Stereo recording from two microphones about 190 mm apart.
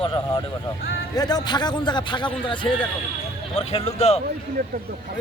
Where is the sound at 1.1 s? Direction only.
20° left (ahead or behind).